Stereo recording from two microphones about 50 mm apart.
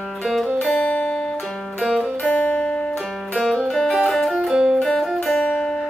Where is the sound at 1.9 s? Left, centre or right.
Right.